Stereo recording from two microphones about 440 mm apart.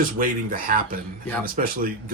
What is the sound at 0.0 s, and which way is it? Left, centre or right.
Speech, centre.